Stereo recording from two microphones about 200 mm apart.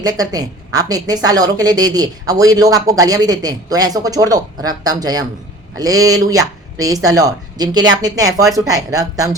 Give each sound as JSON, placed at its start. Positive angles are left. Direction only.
{"t": 0.0, "sound": "a woman's voice", "side_deg": -20}